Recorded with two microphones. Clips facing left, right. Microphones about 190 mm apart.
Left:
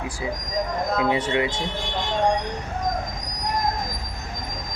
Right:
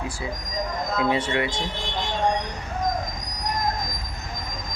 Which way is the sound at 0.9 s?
15° left (ahead or behind).